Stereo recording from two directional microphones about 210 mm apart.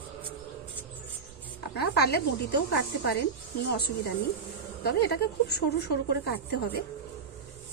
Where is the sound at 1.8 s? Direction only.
50° left (ahead or behind).